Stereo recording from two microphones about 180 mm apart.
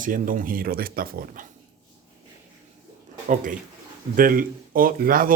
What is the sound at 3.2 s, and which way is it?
Speech, 45° right (ahead or behind).